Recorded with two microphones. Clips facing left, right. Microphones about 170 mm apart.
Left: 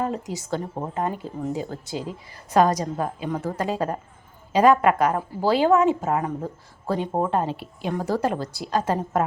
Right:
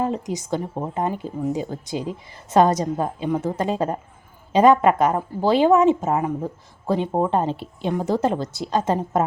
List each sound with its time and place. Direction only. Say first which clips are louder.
0.0 s a woman's voice: right 3 dB; 20° right (ahead or behind)